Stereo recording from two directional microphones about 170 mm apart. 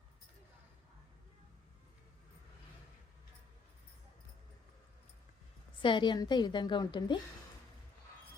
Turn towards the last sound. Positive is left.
turn(degrees=30)  # may be behind; listen again after turning